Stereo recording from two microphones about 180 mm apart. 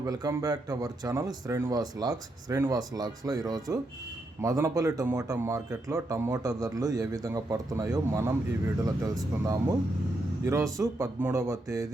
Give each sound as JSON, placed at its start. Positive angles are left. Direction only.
{"t": 0.0, "sound": "speech", "side_deg": -20}